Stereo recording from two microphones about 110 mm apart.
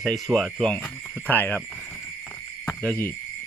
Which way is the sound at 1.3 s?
15° left (ahead or behind).